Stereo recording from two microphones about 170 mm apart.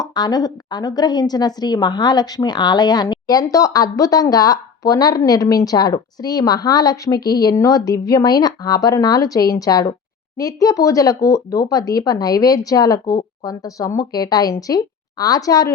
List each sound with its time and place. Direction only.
0.0 s a woman's voice: 25° left (ahead or behind)